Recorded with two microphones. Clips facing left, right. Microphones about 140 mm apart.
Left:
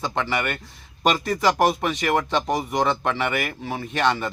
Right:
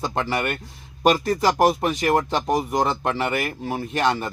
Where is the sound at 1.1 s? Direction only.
40° right (ahead or behind).